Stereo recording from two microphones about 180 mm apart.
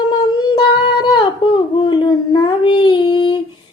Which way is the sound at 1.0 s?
25° left (ahead or behind).